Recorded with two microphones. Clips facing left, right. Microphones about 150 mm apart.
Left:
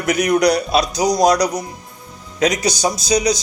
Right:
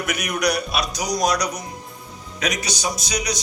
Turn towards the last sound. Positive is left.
turn(degrees=30)  # may be behind; listen again after turning